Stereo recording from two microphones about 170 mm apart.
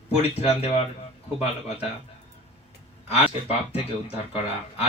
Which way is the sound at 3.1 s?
35° left (ahead or behind).